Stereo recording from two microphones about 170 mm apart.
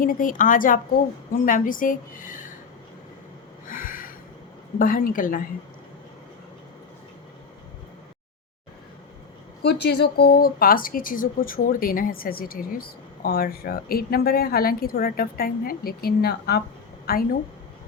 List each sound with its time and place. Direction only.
0.0 s a woman's voice: 55° left (ahead or behind)
3.7 s a sound: 55° left (ahead or behind)
4.8 s speech: 55° left (ahead or behind)
9.6 s speech: 75° left (ahead or behind)